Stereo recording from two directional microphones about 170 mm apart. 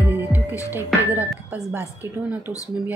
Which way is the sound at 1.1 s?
5° right (ahead or behind).